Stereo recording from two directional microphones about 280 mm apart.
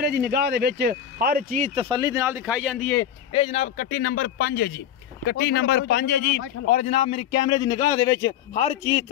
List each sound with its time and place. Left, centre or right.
0.0 s speech: right; by 3.1 s centre
3.3 s a man's voice: centre; by 6.2 s left
6.7 s a man's voice: left